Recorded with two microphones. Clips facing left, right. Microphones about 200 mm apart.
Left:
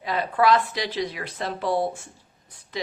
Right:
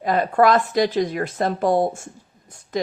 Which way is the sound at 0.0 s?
45° right (ahead or behind).